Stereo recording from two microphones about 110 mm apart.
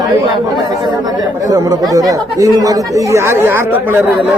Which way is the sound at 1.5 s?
30° right (ahead or behind).